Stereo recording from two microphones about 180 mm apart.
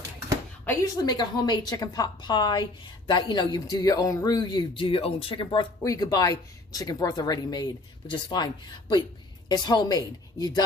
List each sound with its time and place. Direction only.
1.0 s speech: 25° left (ahead or behind)
9.5 s speech: 20° left (ahead or behind)